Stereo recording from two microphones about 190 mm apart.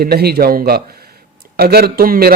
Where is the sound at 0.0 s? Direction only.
55° right (ahead or behind).